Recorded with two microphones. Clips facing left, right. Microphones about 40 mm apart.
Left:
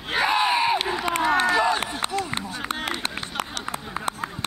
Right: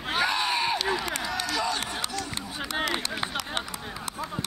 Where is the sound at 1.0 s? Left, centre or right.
Left.